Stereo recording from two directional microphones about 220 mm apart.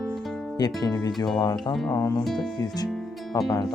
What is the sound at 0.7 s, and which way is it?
Music, 15° left (ahead or behind).